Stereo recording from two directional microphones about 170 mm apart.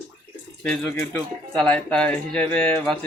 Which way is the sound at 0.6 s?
10° left (ahead or behind).